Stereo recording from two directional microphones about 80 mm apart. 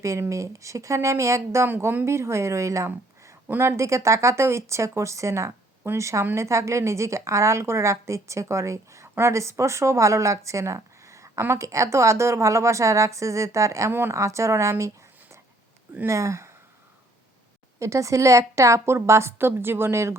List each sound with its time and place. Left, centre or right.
0.0 s a woman's voice: right
1.6 s a woman's voice: right
17.7 s a woman's voice: right